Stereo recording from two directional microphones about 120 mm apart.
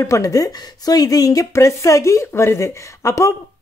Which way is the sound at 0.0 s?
25° left (ahead or behind).